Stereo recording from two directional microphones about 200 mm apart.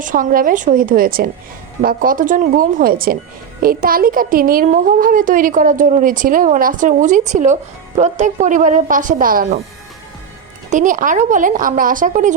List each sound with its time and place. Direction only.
0.0 s a child's voice: 40° right (ahead or behind)
10.7 s a child's voice: 40° right (ahead or behind)